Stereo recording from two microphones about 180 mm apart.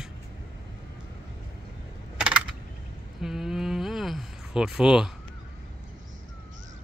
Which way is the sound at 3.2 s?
Centre (ahead or behind).